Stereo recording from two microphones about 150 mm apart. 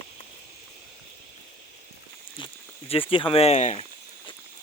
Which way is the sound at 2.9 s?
35° left (ahead or behind).